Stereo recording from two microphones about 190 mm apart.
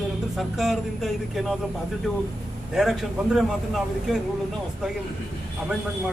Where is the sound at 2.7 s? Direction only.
Centre (ahead or behind).